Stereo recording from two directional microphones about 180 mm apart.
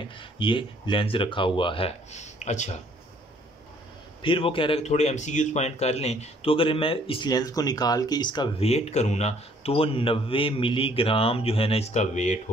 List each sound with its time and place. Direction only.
0.2 s speech: 30° left (ahead or behind)
4.2 s a man's voice: 30° left (ahead or behind)